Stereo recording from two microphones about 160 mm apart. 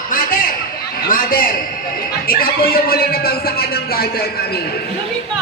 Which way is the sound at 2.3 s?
70° left (ahead or behind).